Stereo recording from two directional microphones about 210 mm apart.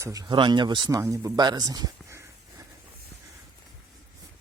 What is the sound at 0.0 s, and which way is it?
Speech, 15° right (ahead or behind).